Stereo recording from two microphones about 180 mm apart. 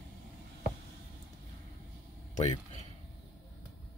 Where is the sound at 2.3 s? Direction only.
35° left (ahead or behind).